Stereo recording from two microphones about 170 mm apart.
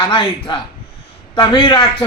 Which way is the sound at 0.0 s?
25° left (ahead or behind).